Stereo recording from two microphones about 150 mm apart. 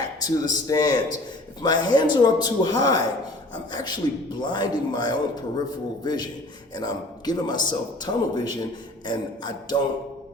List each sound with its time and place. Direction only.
0.0 s a man's voice: 25° left (ahead or behind)